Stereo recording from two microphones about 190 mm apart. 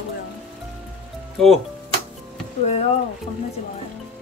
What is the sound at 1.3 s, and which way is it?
Speech, centre (ahead or behind).